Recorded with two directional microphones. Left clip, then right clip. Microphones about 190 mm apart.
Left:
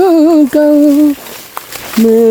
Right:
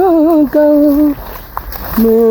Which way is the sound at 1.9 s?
5° left (ahead or behind).